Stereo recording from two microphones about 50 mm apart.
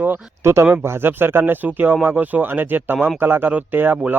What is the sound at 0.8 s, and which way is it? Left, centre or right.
Speech, right.